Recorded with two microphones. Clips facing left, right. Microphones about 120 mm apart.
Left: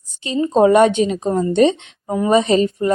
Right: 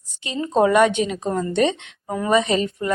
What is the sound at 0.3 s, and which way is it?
A woman's voice, 30° left (ahead or behind).